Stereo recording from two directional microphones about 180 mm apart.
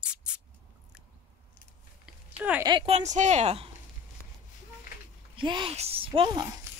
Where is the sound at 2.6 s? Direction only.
25° right (ahead or behind).